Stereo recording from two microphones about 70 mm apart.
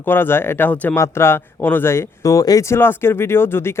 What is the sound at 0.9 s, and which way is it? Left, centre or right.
Speech, left.